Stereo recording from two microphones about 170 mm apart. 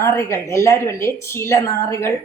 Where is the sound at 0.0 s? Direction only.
15° left (ahead or behind).